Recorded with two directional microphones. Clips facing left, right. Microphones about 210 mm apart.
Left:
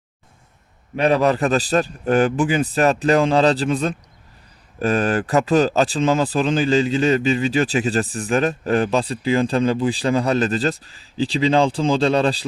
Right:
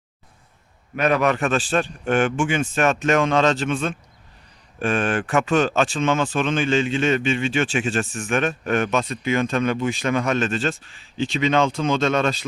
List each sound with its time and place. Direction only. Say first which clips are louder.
0.9 s speech: left 3 dB; 30° left (ahead or behind)